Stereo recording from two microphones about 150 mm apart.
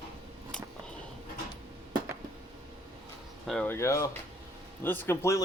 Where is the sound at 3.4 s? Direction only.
5° left (ahead or behind).